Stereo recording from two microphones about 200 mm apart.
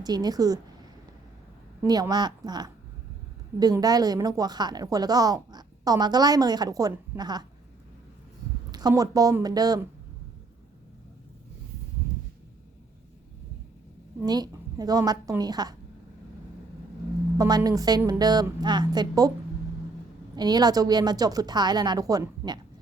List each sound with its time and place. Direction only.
0.0 s a woman's voice: 20° right (ahead or behind)
1.8 s a woman's voice: 20° right (ahead or behind)
8.7 s speech: 20° right (ahead or behind)
14.3 s a woman's voice: 20° right (ahead or behind)
17.3 s a woman's voice: 20° right (ahead or behind)
20.3 s a woman's voice: 20° right (ahead or behind)